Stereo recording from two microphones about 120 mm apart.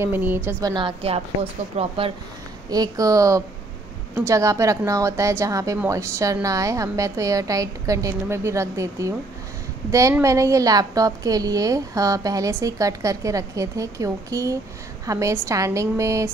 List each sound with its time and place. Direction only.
0.0 s a woman's voice: 15° right (ahead or behind)
0.6 s a woman's voice: 30° right (ahead or behind)
0.8 s a woman's voice: 55° right (ahead or behind)
2.7 s a woman's voice: 30° right (ahead or behind)